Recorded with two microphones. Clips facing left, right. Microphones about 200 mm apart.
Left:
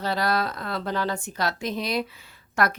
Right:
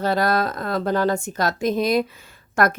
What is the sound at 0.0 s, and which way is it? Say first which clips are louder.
Speech: right 5 dB; 50° right (ahead or behind).